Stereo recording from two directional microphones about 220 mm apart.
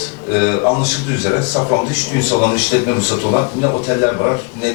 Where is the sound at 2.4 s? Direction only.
15° left (ahead or behind).